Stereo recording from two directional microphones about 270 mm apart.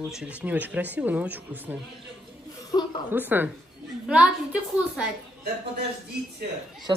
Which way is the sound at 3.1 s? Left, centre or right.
Centre.